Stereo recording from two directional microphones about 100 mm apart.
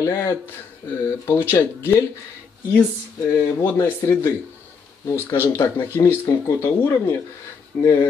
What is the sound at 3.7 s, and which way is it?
Speech, 25° left (ahead or behind).